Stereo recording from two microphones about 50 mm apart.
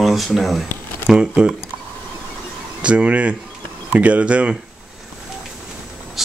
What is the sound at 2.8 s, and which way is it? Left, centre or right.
Speech, right.